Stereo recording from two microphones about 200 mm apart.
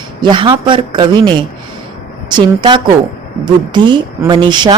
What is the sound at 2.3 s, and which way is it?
A woman's voice, 25° right (ahead or behind).